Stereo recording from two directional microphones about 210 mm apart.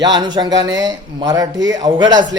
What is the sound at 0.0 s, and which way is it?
Speech, 20° right (ahead or behind).